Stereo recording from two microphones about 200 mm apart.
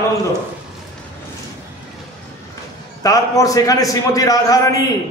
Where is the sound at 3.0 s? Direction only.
15° left (ahead or behind).